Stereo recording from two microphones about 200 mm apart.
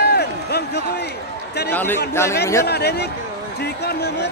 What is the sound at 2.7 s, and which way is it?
Speech, 55° left (ahead or behind).